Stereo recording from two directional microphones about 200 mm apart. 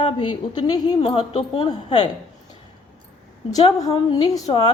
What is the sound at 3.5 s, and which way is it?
A woman's voice, 20° left (ahead or behind).